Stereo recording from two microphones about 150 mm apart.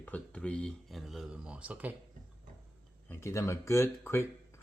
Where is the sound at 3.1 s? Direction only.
15° left (ahead or behind).